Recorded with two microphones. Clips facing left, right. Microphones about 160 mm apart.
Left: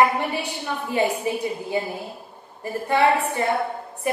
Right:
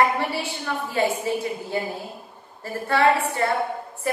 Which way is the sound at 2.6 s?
20° left (ahead or behind).